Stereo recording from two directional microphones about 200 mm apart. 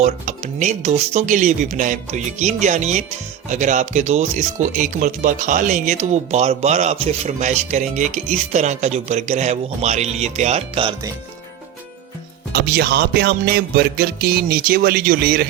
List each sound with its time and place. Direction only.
0.0 s speech: 35° right (ahead or behind)
12.5 s music: 50° right (ahead or behind)